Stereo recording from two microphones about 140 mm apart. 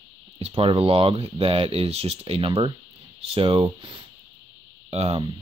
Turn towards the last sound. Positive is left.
turn(degrees=-45)  # may be behind; listen again after turning